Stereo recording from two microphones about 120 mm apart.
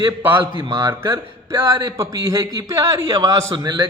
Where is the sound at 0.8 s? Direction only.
20° right (ahead or behind).